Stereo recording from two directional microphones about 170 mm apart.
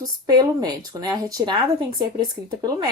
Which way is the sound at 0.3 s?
20° right (ahead or behind).